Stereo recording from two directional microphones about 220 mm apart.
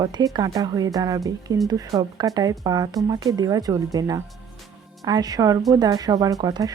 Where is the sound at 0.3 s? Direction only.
15° right (ahead or behind).